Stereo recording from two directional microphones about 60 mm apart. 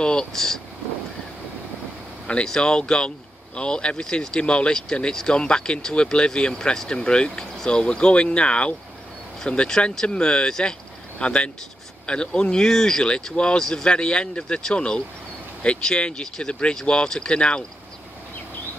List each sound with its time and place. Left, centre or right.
0.0 s speech: centre
2.2 s speech: centre